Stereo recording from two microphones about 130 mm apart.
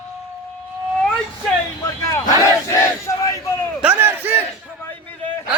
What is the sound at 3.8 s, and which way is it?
Crowd, 10° right (ahead or behind).